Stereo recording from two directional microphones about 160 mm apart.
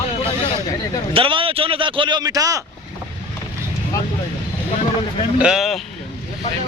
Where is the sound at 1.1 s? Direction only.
35° right (ahead or behind).